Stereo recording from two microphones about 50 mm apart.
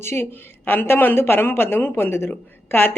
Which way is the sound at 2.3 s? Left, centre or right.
Left.